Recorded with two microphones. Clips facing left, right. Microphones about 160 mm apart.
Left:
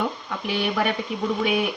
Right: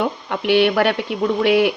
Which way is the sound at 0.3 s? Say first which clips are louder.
Right 10 dB; 75° right (ahead or behind).